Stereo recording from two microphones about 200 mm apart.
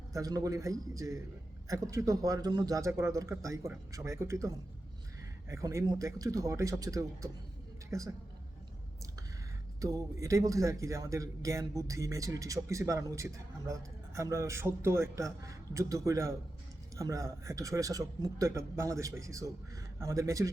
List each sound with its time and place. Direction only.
0.1 s a man's voice: 15° right (ahead or behind)
9.8 s a man's voice: 15° right (ahead or behind)